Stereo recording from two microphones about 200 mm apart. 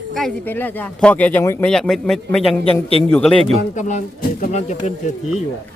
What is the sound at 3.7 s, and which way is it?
Speech, 35° left (ahead or behind).